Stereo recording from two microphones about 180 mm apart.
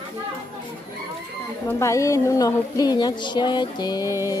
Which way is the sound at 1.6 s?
15° left (ahead or behind).